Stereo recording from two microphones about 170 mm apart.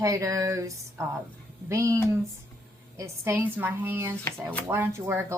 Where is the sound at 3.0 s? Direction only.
15° right (ahead or behind).